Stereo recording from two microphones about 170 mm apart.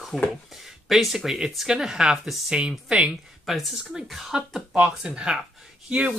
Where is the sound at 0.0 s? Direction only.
Centre (ahead or behind).